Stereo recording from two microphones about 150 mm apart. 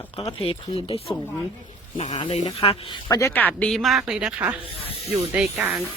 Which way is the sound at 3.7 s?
Centre (ahead or behind).